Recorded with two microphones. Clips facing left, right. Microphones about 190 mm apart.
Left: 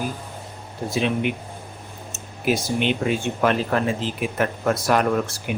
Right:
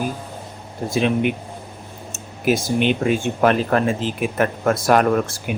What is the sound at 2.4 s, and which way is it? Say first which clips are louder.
Speech: right 3 dB; 50° right (ahead or behind).